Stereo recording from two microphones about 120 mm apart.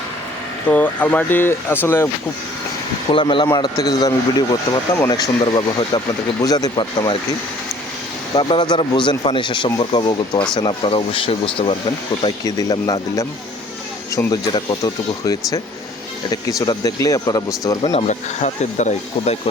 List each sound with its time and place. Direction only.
0.7 s speech: 15° left (ahead or behind)
3.1 s speech: 45° left (ahead or behind)
3.8 s speech: 30° left (ahead or behind)
8.4 s speech: 40° left (ahead or behind)
12.2 s speech: 30° left (ahead or behind)
14.3 s speech: 35° left (ahead or behind)
17.9 s speech: 70° left (ahead or behind)